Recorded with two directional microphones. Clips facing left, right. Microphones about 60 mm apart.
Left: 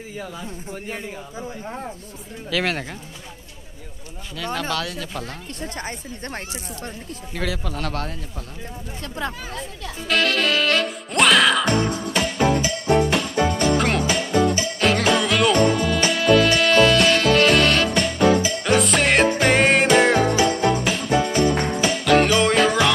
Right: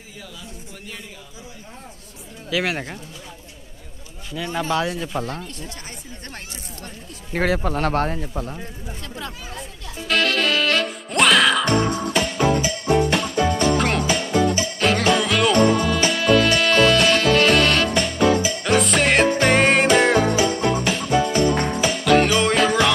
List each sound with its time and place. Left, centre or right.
2.5 s speech: centre
4.6 s speech: right
5.6 s speech: left
7.3 s speech: right
9.1 s speech: left
10.0 s music: centre